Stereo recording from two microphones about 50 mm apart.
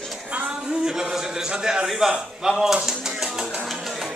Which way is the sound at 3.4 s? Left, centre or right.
Centre.